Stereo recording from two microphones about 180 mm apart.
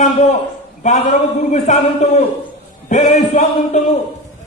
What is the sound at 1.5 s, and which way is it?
A man's voice, 40° left (ahead or behind).